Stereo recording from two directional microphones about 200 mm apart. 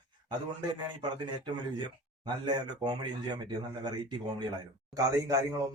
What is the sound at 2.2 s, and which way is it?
Speech, 20° right (ahead or behind).